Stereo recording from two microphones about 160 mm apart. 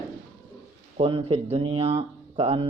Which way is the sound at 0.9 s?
40° right (ahead or behind).